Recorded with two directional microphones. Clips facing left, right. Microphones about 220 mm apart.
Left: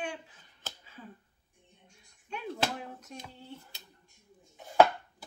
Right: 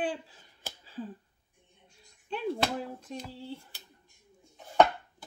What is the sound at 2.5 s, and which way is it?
Speech, 30° right (ahead or behind).